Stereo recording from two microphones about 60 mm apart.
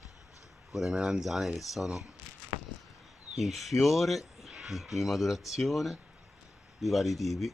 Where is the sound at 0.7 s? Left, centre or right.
Centre.